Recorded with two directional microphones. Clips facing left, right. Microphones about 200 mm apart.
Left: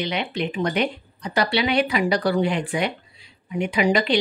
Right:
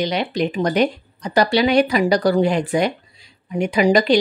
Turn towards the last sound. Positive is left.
turn(degrees=-40)  # may be behind; listen again after turning